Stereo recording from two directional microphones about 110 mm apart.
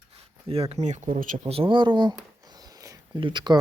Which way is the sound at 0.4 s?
60° right (ahead or behind).